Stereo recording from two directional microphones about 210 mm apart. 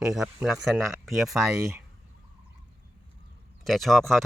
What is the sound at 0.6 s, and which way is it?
Speech, centre (ahead or behind).